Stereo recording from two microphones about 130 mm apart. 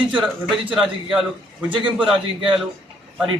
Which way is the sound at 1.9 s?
10° right (ahead or behind).